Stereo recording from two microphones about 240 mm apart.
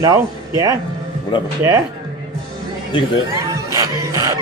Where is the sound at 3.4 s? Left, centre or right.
Centre.